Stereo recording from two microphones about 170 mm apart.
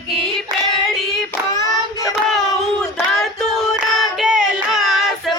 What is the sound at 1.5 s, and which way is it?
Child singing, 20° left (ahead or behind).